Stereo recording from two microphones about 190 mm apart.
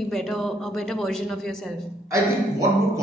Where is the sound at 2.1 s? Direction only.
15° right (ahead or behind).